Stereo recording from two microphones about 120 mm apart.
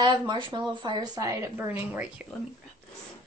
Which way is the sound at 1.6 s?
15° right (ahead or behind).